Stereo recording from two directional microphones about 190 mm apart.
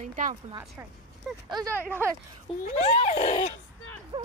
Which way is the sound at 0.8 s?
15° right (ahead or behind).